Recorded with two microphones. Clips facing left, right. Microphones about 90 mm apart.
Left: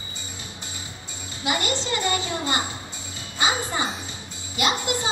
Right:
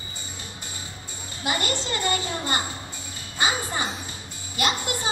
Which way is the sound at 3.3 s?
20° left (ahead or behind).